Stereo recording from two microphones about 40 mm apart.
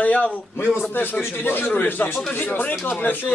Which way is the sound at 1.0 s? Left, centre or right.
Left.